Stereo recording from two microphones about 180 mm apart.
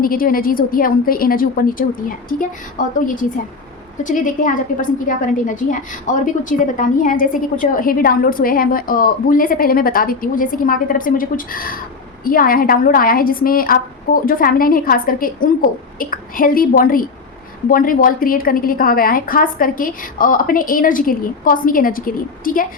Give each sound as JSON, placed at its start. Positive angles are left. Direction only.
{"t": 0.0, "sound": "a woman's voice", "side_deg": 55}